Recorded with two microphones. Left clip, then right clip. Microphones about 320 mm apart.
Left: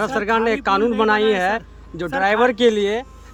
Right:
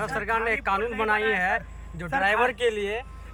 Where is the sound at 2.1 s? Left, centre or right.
Left.